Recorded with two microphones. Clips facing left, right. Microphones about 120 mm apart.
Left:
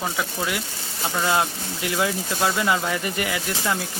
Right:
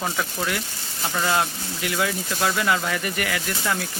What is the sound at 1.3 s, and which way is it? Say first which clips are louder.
Speech: left 1 dB; 20° left (ahead or behind).